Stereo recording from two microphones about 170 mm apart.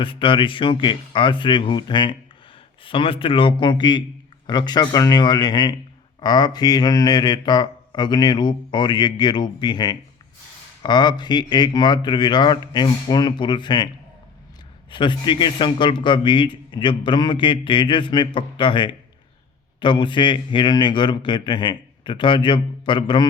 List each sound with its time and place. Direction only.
0.0 s speech: 30° left (ahead or behind)
14.8 s speech: 30° left (ahead or behind)